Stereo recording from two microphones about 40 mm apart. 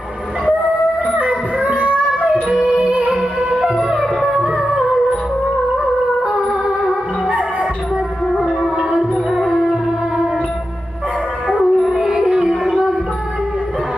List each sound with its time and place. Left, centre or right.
1.1 s music: right
2.5 s music: centre
2.8 s music: right
4.0 s music: centre
7.3 s music: right
8.8 s music: centre
9.3 s music: centre
11.6 s howl: centre
12.5 s a sound: centre